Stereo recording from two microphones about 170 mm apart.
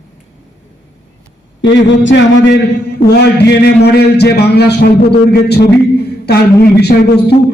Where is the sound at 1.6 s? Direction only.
90° left.